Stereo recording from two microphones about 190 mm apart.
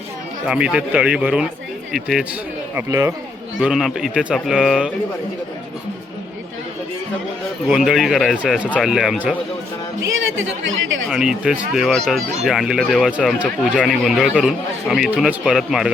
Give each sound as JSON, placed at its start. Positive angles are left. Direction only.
{"t": 0.4, "sound": "speech", "side_deg": -5}
{"t": 2.7, "sound": "speech", "side_deg": -15}
{"t": 3.6, "sound": "speech", "side_deg": 0}
{"t": 7.7, "sound": "speech", "side_deg": -5}
{"t": 10.1, "sound": "speech", "side_deg": -90}
{"t": 11.1, "sound": "speech", "side_deg": -5}